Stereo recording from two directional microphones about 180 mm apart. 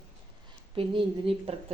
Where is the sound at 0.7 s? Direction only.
30° right (ahead or behind).